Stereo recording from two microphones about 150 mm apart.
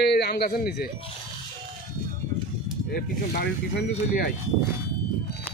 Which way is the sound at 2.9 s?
90° left.